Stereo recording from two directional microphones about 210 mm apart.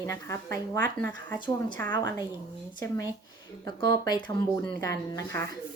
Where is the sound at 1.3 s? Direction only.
20° left (ahead or behind).